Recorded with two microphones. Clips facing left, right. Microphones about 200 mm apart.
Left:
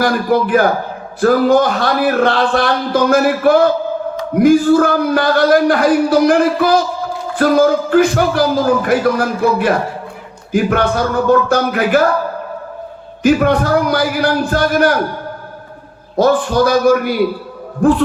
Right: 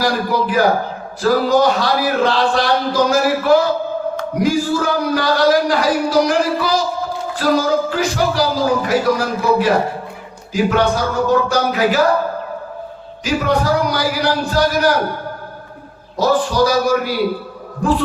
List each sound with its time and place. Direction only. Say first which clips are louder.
0.0 s a man's voice: left 4 dB; 55° left (ahead or behind)
13.2 s a man's voice: left 5 dB; 55° left (ahead or behind)
16.1 s a man's voice: left 3 dB; 55° left (ahead or behind)